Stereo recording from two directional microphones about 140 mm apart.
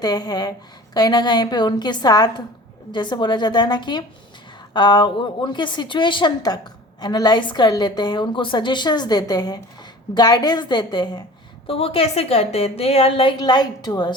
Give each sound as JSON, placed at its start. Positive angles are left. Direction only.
{"t": 0.0, "sound": "a woman's voice", "side_deg": 30}
{"t": 11.6, "sound": "a woman's voice", "side_deg": 45}
{"t": 13.4, "sound": "a woman's voice", "side_deg": 30}